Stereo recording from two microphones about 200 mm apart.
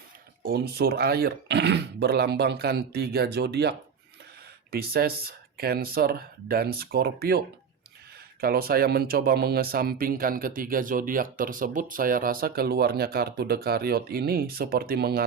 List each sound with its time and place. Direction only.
0.4 s speech: 50° right (ahead or behind)